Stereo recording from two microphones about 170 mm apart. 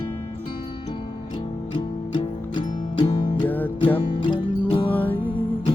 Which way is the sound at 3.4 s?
10° left (ahead or behind).